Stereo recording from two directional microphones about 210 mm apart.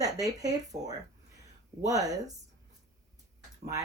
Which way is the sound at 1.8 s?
15° right (ahead or behind).